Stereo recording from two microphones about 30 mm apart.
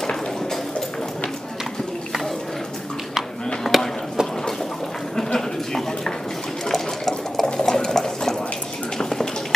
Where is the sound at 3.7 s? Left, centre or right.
Centre.